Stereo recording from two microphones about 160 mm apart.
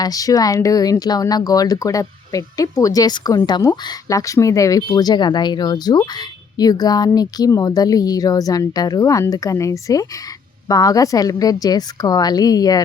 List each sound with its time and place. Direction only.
0.0 s speech: 20° left (ahead or behind)